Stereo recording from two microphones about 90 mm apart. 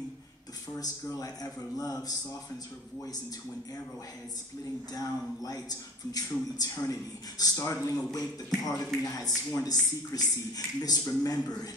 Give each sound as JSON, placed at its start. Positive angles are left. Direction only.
{"t": 1.0, "sound": "a man's voice", "side_deg": 40}
{"t": 4.9, "sound": "a man's voice", "side_deg": 45}